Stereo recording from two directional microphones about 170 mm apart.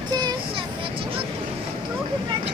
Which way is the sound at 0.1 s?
20° right (ahead or behind).